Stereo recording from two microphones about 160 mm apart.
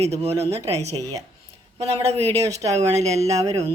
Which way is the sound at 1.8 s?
40° right (ahead or behind).